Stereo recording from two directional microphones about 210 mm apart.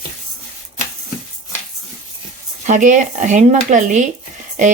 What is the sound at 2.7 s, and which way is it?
Speech, 35° right (ahead or behind).